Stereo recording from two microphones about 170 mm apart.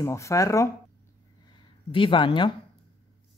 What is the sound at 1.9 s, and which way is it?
Speech, 30° left (ahead or behind).